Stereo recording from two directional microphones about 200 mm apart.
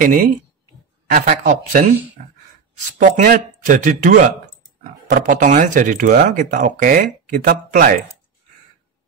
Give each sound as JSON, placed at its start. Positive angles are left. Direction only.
{"t": 0.0, "sound": "speech", "side_deg": -40}
{"t": 2.2, "sound": "sigh", "side_deg": -40}
{"t": 2.8, "sound": "speech", "side_deg": -40}